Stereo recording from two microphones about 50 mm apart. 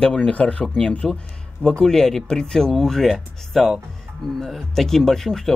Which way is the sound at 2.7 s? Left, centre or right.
Centre.